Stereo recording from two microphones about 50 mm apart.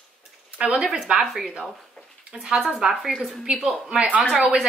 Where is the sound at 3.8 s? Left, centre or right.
Right.